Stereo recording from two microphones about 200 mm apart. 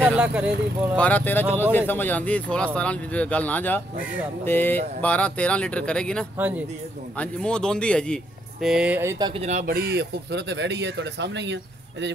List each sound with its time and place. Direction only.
0.1 s speech: 5° right (ahead or behind)
0.9 s a man's voice: 5° left (ahead or behind)
6.3 s speech: 10° right (ahead or behind)
7.2 s a man's voice: 5° left (ahead or behind); by 9.3 s 15° right (ahead or behind)
9.3 s speech: 35° right (ahead or behind); by 12.1 s 65° right (ahead or behind)